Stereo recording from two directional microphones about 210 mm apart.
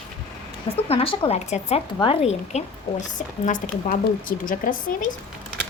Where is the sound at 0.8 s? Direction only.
25° left (ahead or behind).